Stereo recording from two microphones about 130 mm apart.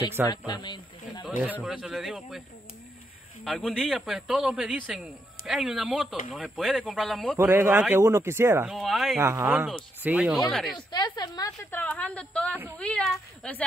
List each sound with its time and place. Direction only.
0.5 s speech: 35° left (ahead or behind)
1.5 s a man's voice: 5° right (ahead or behind)
3.4 s a man's voice: centre (ahead or behind)
7.3 s speech: 15° right (ahead or behind)
8.6 s a man's voice: centre (ahead or behind)
9.2 s speech: 20° right (ahead or behind)
9.5 s a man's voice: 5° right (ahead or behind)
10.9 s a woman's voice: 35° left (ahead or behind)
11.7 s a woman's voice: 10° left (ahead or behind)